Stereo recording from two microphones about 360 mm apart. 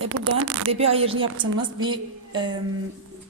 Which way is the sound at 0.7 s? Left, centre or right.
Centre.